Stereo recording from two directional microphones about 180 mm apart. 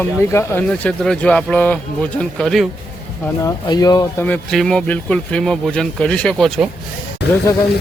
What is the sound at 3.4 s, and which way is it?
Speech, 20° left (ahead or behind).